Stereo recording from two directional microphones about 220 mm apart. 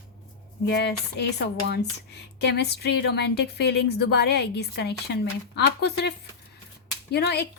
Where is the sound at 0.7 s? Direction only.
50° left (ahead or behind).